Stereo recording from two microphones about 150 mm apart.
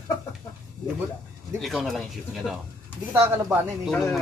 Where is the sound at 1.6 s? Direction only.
Centre (ahead or behind).